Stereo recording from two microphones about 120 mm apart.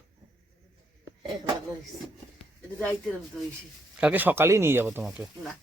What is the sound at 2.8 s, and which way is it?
Speech, 10° left (ahead or behind).